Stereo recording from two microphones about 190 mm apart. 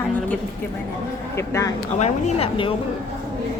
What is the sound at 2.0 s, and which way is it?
Speech, 35° left (ahead or behind).